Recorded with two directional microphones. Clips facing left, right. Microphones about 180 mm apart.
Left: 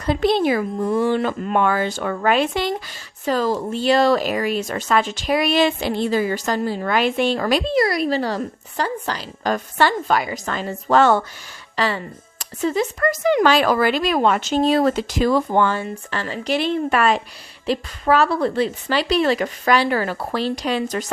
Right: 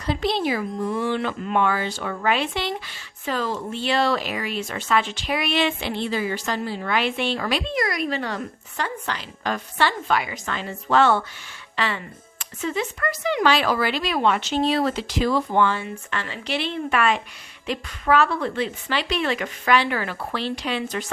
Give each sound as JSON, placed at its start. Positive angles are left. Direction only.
{"t": 0.0, "sound": "speech", "side_deg": 50}